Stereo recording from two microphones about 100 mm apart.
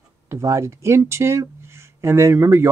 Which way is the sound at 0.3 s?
30° right (ahead or behind).